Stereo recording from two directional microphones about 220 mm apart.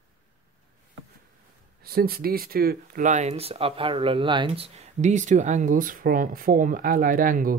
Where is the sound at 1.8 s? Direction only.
45° right (ahead or behind).